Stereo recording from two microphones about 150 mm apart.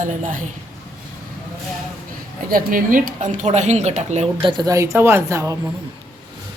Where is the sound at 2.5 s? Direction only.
70° right (ahead or behind); by 5.6 s 20° right (ahead or behind).